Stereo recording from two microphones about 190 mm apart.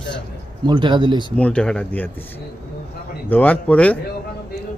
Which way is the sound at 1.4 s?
5° left (ahead or behind).